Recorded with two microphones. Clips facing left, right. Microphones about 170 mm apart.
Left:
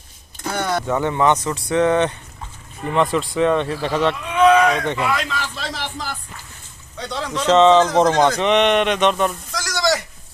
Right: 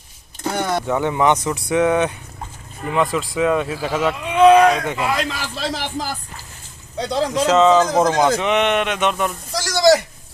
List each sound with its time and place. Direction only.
0.4 s vehicle: 15° right (ahead or behind)
0.8 s speech: 10° right (ahead or behind)
4.3 s a sound: 30° right (ahead or behind)
5.0 s speech: 35° right (ahead or behind)
7.4 s speech: 5° right (ahead or behind)
9.5 s a sound: 30° right (ahead or behind)